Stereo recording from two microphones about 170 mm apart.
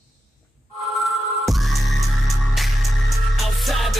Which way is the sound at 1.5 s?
Centre (ahead or behind).